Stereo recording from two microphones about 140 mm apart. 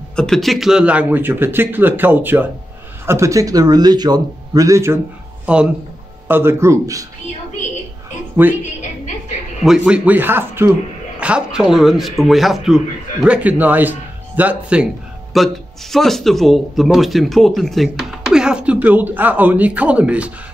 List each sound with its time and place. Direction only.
0.1 s a man's voice: 5° left (ahead or behind); by 5.0 s 20° right (ahead or behind)
5.5 s a man's voice: 10° right (ahead or behind)
9.6 s a man's voice: 5° right (ahead or behind)
15.3 s speech: centre (ahead or behind)